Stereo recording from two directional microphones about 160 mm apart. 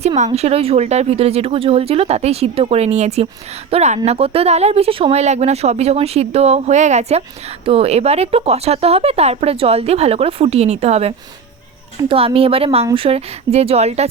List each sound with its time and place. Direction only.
0.3 s speech: 40° right (ahead or behind)